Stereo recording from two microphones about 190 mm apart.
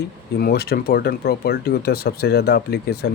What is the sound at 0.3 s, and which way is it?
Speech, 55° left (ahead or behind).